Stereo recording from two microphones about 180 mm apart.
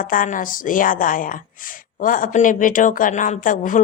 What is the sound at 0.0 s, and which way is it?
A woman's voice, 50° left (ahead or behind).